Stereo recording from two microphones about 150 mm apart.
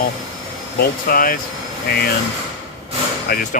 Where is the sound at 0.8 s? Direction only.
75° left (ahead or behind).